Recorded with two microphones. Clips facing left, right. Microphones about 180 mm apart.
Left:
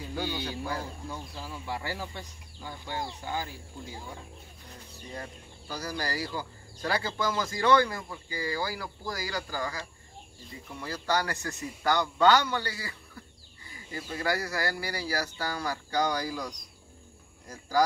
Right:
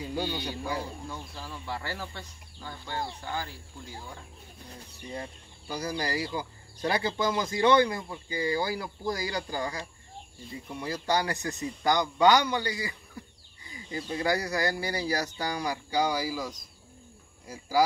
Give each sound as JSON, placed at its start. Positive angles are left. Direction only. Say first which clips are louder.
{"t": 0.1, "sound": "a man's voice", "louder": "even", "side_deg": -15}
{"t": 1.1, "sound": "speech", "louder": "left 1 dB", "side_deg": 10}
{"t": 5.1, "sound": "a man's voice", "louder": "right 2 dB", "side_deg": -15}
{"t": 14.1, "sound": "a man's voice", "louder": "right 2 dB", "side_deg": -20}